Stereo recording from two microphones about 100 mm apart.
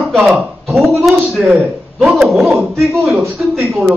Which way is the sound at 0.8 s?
Centre (ahead or behind).